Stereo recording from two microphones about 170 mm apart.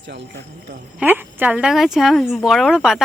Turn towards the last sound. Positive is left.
turn(degrees=0)  # may be behind; listen again after turning